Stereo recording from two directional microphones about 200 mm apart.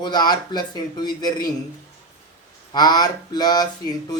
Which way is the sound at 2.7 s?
20° left (ahead or behind).